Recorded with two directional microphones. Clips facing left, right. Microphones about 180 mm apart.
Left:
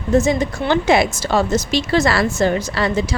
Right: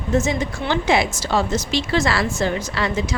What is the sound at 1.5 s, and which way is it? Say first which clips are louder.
A woman's voice: left 4 dB; 40° left (ahead or behind).